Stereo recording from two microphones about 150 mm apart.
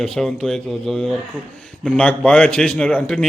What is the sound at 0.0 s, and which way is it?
A man's voice, 5° left (ahead or behind).